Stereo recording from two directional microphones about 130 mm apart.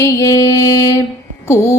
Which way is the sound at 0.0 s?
25° left (ahead or behind).